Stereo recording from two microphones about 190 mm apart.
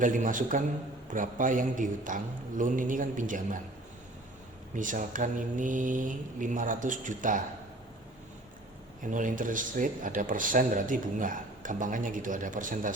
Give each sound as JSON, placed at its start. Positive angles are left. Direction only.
{"t": 0.0, "sound": "speech", "side_deg": -45}
{"t": 4.7, "sound": "speech", "side_deg": -45}
{"t": 9.0, "sound": "speech", "side_deg": -45}